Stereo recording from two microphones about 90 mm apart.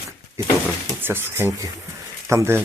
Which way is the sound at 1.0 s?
25° right (ahead or behind).